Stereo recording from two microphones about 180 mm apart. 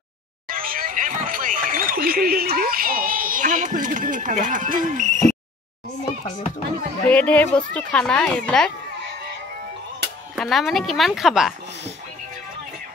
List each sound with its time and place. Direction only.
0.5 s a sound: 50° right (ahead or behind)
7.1 s speech: 10° left (ahead or behind)
10.3 s speech: centre (ahead or behind)